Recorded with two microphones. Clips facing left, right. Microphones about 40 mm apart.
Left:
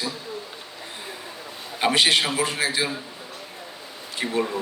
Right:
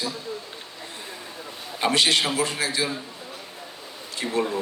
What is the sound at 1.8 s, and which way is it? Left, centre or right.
A man's voice, centre.